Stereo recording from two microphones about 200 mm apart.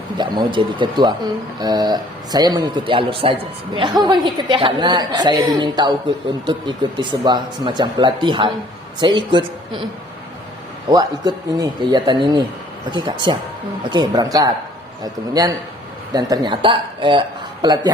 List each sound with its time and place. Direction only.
0.2 s speech: 25° right (ahead or behind)
10.8 s speech: 20° right (ahead or behind)